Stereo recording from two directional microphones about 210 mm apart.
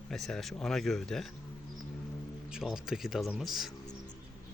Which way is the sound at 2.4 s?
5° right (ahead or behind).